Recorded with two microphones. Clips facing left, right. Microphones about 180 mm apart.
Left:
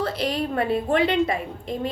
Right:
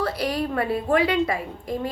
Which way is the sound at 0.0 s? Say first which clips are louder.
Even; 25° left (ahead or behind).